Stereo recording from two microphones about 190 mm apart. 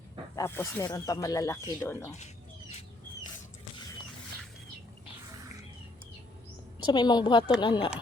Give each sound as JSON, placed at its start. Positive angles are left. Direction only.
{"t": 0.3, "sound": "speech", "side_deg": 15}
{"t": 6.8, "sound": "a woman's voice", "side_deg": 25}